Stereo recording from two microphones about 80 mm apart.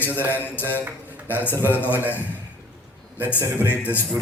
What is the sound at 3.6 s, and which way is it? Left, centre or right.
Speech, left.